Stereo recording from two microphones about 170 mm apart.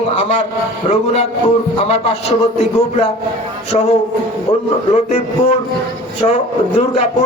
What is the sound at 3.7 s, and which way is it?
A man's voice, 40° left (ahead or behind).